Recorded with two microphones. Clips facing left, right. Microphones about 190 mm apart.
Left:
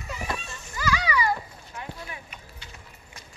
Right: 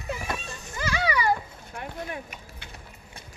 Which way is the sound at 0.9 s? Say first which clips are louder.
Right 2 dB; 55° right (ahead or behind).